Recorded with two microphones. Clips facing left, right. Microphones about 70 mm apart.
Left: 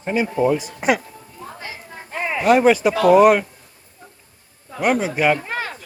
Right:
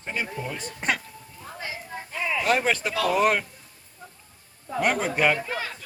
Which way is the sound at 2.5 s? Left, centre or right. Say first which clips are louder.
Left 13 dB; centre.